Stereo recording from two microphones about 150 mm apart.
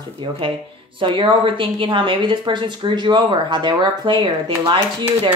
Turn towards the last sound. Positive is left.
turn(degrees=-30)  # may be behind; listen again after turning